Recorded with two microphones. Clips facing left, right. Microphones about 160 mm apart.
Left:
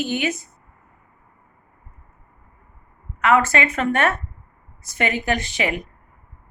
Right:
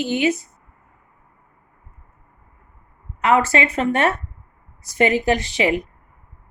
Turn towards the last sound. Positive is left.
turn(degrees=-30)  # may be behind; listen again after turning